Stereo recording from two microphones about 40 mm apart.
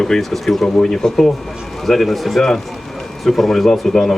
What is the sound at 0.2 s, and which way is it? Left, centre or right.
Speech, centre.